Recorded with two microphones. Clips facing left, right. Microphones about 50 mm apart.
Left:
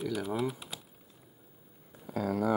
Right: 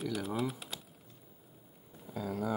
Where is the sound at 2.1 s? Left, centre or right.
Left.